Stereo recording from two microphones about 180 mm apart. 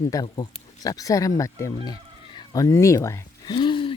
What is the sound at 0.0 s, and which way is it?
Speech, 20° left (ahead or behind).